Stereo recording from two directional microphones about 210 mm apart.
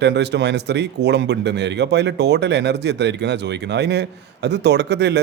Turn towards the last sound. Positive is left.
turn(degrees=-55)  # may be behind; listen again after turning